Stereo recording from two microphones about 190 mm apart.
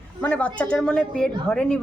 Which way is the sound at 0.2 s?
5° left (ahead or behind).